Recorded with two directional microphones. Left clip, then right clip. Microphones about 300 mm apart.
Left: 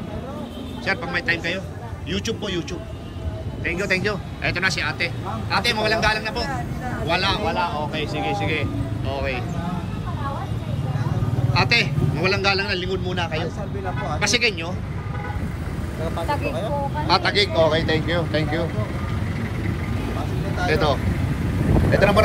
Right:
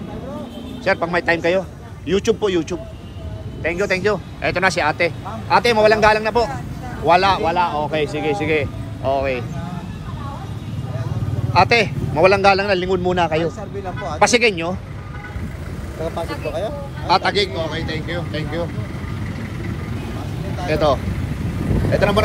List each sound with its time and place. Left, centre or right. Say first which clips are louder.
0.8 s speech: right 5 dB; centre
3.6 s speech: right 4 dB; centre
11.5 s speech: right 5 dB; centre
16.0 s speech: even; right
17.1 s speech: right 3 dB; centre
20.6 s speech: right 3 dB; centre